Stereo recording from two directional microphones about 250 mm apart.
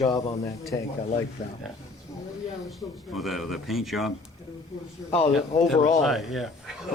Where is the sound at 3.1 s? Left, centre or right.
Centre.